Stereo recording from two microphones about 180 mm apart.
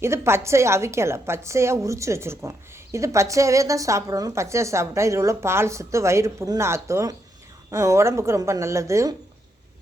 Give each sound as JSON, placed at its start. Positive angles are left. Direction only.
{"t": 0.0, "sound": "a woman's voice", "side_deg": -15}